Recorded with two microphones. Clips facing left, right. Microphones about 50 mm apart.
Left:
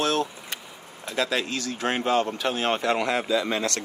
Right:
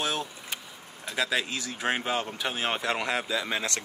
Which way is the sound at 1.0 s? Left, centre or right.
Centre.